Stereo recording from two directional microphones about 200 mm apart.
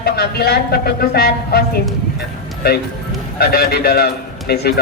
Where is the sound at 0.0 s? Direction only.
50° left (ahead or behind).